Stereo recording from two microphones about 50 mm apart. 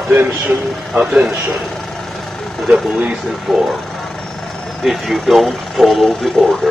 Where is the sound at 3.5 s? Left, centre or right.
Centre.